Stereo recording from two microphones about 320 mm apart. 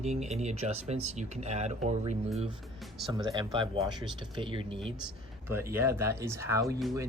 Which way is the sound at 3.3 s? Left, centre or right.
Centre.